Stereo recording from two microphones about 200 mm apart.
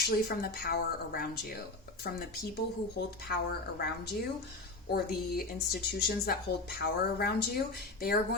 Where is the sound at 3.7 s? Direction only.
55° left (ahead or behind).